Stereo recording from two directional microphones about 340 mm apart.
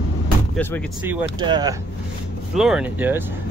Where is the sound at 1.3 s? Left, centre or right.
Centre.